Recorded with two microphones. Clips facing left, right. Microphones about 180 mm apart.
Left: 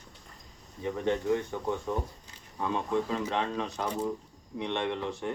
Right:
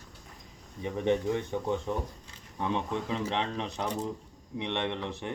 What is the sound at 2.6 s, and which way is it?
Speech, 20° right (ahead or behind).